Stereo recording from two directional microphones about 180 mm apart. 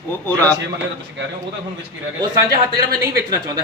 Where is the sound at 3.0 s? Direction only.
20° right (ahead or behind).